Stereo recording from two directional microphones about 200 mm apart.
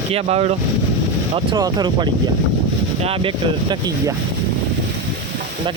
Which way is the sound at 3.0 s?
25° right (ahead or behind).